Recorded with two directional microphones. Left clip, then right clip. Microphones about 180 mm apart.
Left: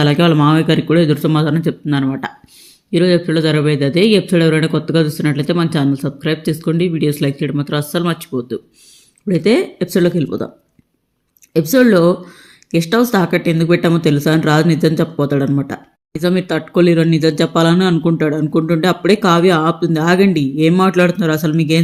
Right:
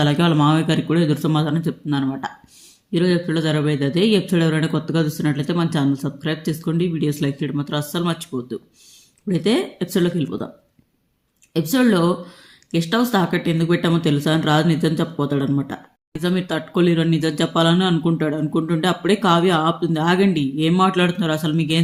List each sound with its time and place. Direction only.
0.0 s a man's voice: 10° left (ahead or behind)
11.5 s a man's voice: 15° left (ahead or behind)